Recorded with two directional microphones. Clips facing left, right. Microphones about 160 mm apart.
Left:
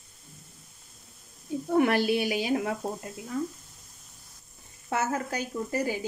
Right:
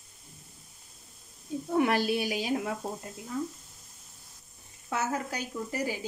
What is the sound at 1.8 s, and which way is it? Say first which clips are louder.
Speech: left 3 dB; 60° left (ahead or behind).